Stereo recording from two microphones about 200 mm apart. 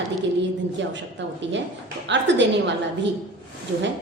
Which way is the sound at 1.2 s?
65° right (ahead or behind).